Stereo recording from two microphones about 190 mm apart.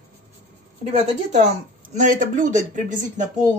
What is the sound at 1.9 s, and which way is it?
Speech, 45° right (ahead or behind).